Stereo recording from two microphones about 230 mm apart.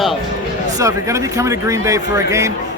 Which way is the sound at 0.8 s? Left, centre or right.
Centre.